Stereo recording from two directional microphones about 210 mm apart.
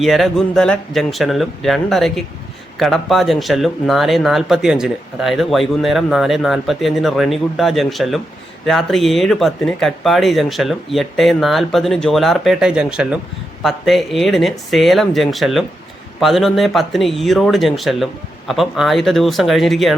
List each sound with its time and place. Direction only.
0.0 s speech: centre (ahead or behind)